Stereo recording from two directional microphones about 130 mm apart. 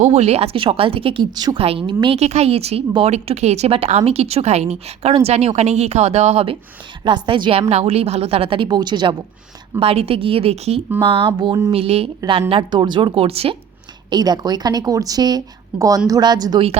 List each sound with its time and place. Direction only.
0.0 s speech: 55° right (ahead or behind); by 1.5 s 35° right (ahead or behind)
1.5 s speech: 45° right (ahead or behind)
2.1 s a woman's voice: 55° right (ahead or behind); by 7.6 s 40° right (ahead or behind)
7.7 s speech: 55° right (ahead or behind); by 9.1 s 35° right (ahead or behind)
9.8 s a woman's voice: 50° right (ahead or behind)
11.7 s speech: 50° right (ahead or behind)
14.1 s a woman's voice: 30° right (ahead or behind)